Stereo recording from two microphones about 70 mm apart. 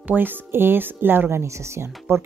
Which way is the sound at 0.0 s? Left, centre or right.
Right.